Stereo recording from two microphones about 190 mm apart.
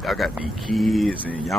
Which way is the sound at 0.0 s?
Centre (ahead or behind).